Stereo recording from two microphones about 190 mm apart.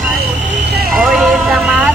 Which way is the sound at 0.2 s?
60° right (ahead or behind).